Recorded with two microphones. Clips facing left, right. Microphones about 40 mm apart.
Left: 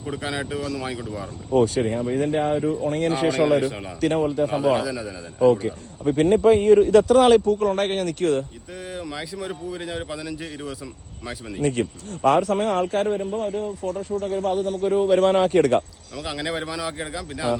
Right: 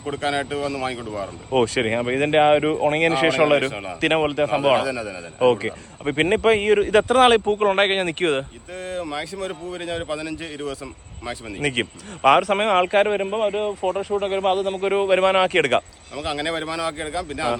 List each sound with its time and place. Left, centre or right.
0.3 s speech: centre
1.5 s a man's voice: right
4.4 s a man's voice: right
4.9 s speech: right
6.2 s a man's voice: right
6.9 s speech: right
8.9 s a man's voice: centre
11.6 s a man's voice: right
13.9 s a man's voice: right
15.4 s a man's voice: right
16.1 s a man's voice: centre